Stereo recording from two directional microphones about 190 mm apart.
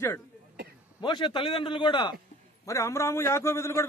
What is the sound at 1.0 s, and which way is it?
A man's voice, 25° left (ahead or behind).